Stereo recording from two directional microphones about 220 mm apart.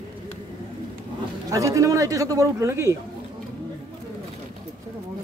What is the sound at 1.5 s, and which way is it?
A man's voice, 15° right (ahead or behind).